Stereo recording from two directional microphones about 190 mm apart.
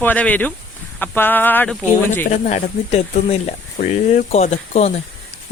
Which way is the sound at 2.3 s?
40° left (ahead or behind).